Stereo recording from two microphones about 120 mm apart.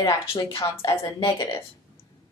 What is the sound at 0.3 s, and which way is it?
A woman's voice, 45° left (ahead or behind).